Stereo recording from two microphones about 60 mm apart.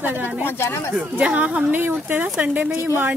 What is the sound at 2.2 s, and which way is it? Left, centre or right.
Speech, right.